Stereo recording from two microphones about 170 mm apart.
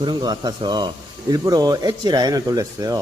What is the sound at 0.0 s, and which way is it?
Speech, 25° right (ahead or behind).